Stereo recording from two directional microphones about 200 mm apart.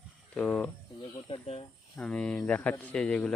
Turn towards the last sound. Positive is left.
turn(degrees=5)  # may be behind; listen again after turning